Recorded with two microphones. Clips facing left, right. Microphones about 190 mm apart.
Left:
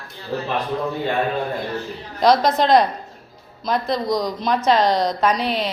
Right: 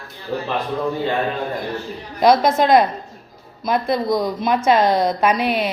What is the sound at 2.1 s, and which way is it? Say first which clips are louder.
A woman's voice: right 2 dB; 5° right (ahead or behind).